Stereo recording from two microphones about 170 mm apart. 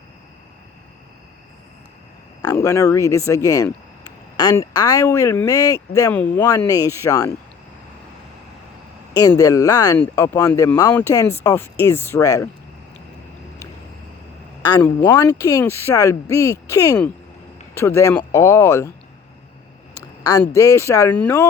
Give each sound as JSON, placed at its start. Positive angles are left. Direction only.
{"t": 2.4, "sound": "speech", "side_deg": 20}
{"t": 9.1, "sound": "speech", "side_deg": 20}
{"t": 14.8, "sound": "speech", "side_deg": 15}
{"t": 20.2, "sound": "speech", "side_deg": 20}